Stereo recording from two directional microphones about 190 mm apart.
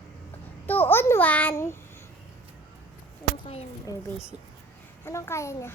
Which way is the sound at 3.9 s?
20° left (ahead or behind).